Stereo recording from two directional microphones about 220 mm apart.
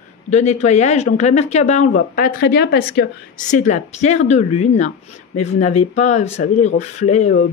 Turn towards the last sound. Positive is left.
turn(degrees=30)  # may be behind; listen again after turning